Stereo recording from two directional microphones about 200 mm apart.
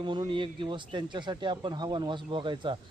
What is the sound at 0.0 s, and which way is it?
Speech, 25° right (ahead or behind).